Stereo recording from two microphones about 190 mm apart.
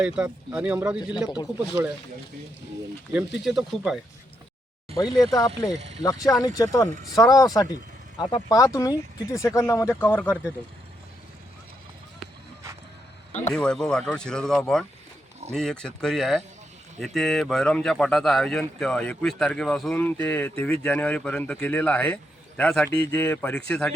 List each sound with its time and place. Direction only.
0.0 s speech: 5° right (ahead or behind)
3.1 s speech: 5° right (ahead or behind)
4.9 s speech: 20° left (ahead or behind)
13.3 s speech: 5° left (ahead or behind)